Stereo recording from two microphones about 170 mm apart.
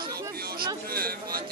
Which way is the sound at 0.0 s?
20° right (ahead or behind).